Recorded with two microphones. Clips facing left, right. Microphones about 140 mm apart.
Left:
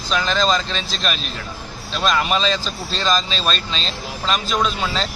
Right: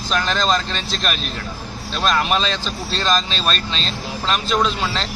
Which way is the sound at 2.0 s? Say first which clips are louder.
Even; centre (ahead or behind).